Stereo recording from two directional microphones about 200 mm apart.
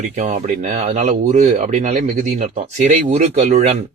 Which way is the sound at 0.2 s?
40° right (ahead or behind).